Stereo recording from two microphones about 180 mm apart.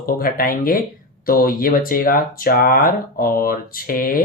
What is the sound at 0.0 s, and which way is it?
Speech, 55° left (ahead or behind).